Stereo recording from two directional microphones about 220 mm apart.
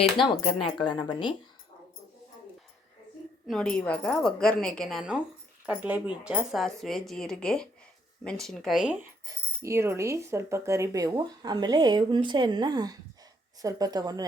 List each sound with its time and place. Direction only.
0.2 s speech: 20° left (ahead or behind)
3.4 s speech: centre (ahead or behind)
9.2 s speech: 10° right (ahead or behind)